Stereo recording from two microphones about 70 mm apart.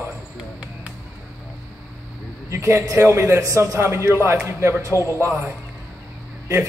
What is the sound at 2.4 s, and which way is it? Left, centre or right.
A man's voice, right.